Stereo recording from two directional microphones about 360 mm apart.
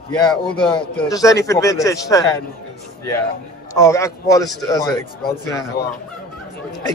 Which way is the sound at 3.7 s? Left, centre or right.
Centre.